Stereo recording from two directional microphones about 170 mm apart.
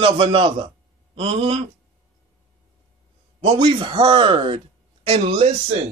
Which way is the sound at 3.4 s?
30° right (ahead or behind).